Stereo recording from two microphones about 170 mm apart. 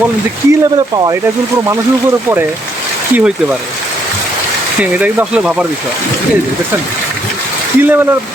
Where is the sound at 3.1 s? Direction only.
10° right (ahead or behind).